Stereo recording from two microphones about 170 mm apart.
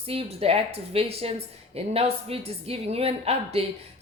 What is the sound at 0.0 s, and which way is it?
A woman's voice, 35° right (ahead or behind).